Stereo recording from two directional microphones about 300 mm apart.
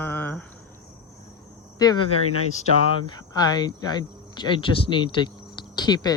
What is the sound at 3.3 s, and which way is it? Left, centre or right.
Speech, centre.